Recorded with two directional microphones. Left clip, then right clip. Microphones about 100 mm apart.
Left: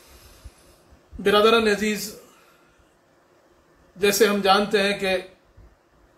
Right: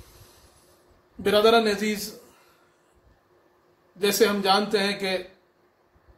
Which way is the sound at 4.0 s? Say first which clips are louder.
Left 3 dB; 25° right (ahead or behind).